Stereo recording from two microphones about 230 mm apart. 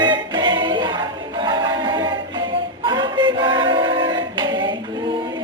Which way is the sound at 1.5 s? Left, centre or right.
Centre.